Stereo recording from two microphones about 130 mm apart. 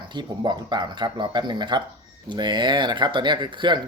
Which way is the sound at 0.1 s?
35° right (ahead or behind).